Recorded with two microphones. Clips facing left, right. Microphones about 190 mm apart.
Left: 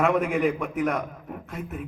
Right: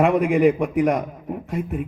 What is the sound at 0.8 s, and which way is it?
A man's voice, 35° right (ahead or behind).